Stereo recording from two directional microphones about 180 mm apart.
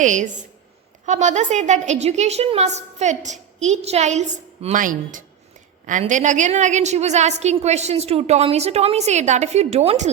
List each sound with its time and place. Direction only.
0.0 s a woman's voice: 45° right (ahead or behind)